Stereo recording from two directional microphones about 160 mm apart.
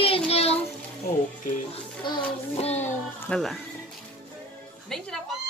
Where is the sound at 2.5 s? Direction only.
40° left (ahead or behind).